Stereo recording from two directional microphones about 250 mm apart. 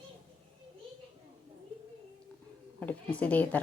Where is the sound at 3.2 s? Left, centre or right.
Centre.